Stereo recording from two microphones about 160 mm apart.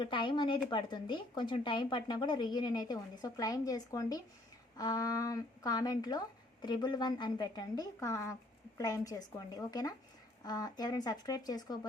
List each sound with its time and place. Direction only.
0.0 s speech: 30° left (ahead or behind)